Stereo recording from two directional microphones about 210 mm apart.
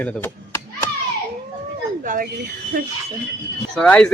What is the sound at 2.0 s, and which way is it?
Speech, 40° right (ahead or behind).